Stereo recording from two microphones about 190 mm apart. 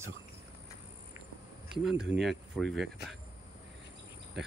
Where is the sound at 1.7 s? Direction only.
5° right (ahead or behind).